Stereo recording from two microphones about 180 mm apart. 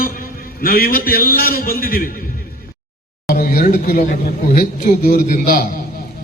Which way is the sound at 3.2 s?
50° left (ahead or behind).